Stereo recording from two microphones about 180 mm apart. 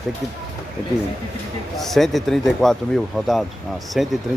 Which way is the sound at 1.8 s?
Centre (ahead or behind).